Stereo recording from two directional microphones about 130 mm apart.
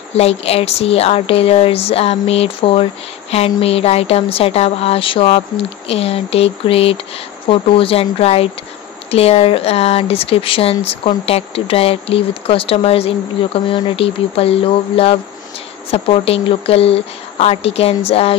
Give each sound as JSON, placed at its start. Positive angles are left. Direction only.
{"t": 0.1, "sound": "a woman's voice", "side_deg": 50}